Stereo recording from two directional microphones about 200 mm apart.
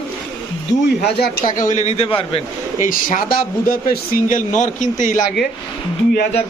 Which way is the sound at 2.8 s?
45° left (ahead or behind).